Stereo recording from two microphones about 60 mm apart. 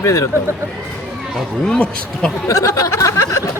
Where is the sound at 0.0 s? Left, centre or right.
Left.